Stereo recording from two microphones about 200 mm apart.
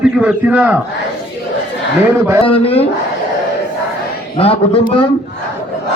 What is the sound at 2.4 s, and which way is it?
Speech, 30° left (ahead or behind).